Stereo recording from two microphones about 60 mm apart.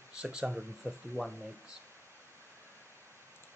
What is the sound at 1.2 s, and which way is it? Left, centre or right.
Speech, right.